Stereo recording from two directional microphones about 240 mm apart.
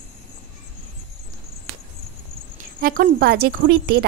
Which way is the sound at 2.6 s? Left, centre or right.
Right.